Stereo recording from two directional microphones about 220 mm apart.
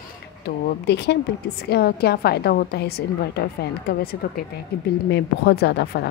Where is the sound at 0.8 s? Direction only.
50° left (ahead or behind).